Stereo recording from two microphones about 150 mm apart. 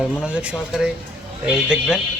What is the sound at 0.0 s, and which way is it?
Speech, 5° right (ahead or behind).